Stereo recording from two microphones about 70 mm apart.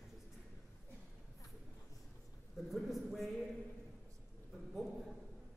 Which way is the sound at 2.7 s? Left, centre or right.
Centre.